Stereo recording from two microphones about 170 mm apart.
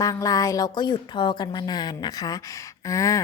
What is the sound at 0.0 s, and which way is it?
A woman's voice, 20° left (ahead or behind).